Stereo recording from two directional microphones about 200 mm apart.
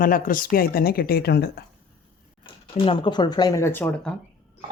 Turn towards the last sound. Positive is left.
turn(degrees=10)  # may be behind; listen again after turning